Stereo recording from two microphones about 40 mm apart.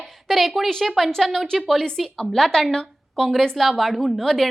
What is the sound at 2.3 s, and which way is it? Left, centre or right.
A woman's voice, centre.